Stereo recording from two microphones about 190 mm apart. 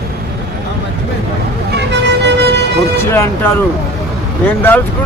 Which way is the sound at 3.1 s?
15° left (ahead or behind).